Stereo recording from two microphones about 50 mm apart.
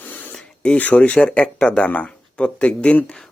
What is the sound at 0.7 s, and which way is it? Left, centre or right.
Speech, left.